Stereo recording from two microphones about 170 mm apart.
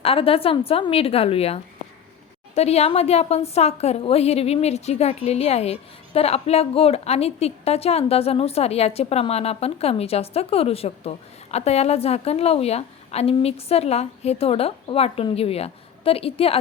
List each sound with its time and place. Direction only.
0.0 s a woman's voice: 35° left (ahead or behind)
2.6 s a woman's voice: 40° left (ahead or behind)